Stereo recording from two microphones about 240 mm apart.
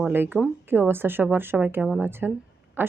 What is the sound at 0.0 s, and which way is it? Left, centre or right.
A woman's voice, centre.